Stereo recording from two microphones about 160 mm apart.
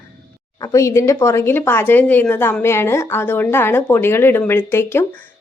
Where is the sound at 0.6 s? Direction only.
20° left (ahead or behind).